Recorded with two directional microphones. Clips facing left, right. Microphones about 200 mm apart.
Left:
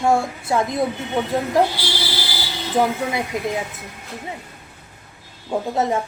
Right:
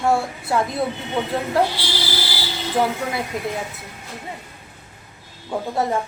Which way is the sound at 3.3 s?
20° left (ahead or behind).